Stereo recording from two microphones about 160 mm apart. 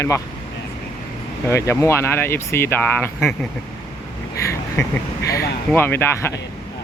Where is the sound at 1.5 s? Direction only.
20° left (ahead or behind).